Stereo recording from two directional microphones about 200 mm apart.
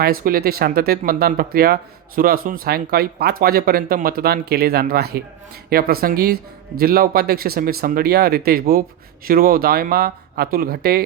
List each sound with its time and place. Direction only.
0.0 s speech: 45° right (ahead or behind)